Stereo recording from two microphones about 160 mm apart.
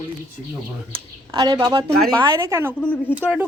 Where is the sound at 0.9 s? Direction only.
30° right (ahead or behind).